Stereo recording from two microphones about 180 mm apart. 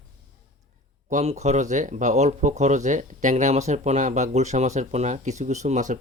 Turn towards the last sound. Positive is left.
turn(degrees=-40)  # may be behind; listen again after turning